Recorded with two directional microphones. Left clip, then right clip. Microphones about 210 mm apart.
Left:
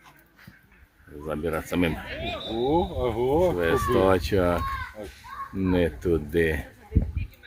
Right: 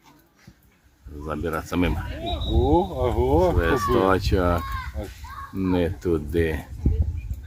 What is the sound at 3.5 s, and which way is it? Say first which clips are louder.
Speech: right 1 dB; centre (ahead or behind).